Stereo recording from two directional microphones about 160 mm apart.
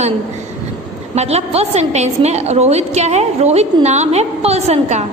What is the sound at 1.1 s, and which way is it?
A woman's voice, 40° right (ahead or behind).